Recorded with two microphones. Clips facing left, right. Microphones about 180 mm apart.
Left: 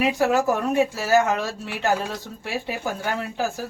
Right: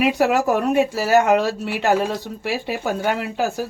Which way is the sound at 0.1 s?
70° right (ahead or behind).